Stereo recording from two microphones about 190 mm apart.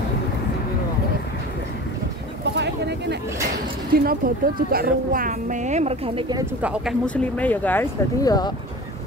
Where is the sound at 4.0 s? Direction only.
50° right (ahead or behind); by 6.4 s 25° right (ahead or behind).